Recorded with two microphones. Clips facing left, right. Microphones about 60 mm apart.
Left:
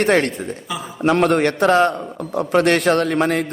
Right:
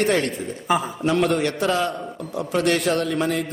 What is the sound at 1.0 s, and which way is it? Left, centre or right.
A man's voice, left.